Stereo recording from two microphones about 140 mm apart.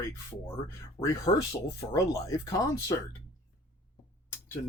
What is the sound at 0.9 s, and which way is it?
Speech, 20° left (ahead or behind).